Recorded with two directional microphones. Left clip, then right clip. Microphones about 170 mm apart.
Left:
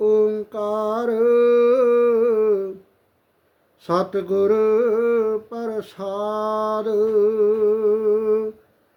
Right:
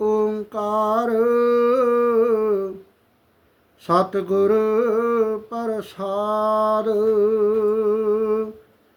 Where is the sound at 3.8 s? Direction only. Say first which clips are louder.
Right 2 dB; 15° right (ahead or behind).